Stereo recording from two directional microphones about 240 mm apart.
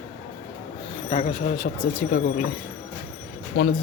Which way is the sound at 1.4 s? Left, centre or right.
Left.